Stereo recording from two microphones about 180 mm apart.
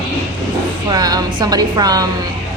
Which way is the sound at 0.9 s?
20° right (ahead or behind).